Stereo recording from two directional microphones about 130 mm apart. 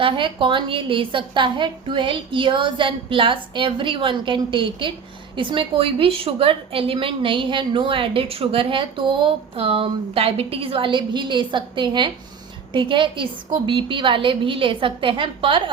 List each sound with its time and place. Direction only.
0.0 s a woman's voice: 40° right (ahead or behind)